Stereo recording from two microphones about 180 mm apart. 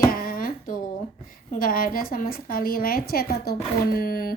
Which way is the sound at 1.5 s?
50° left (ahead or behind).